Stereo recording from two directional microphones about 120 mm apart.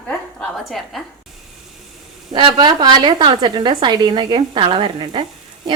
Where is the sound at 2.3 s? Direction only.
40° right (ahead or behind).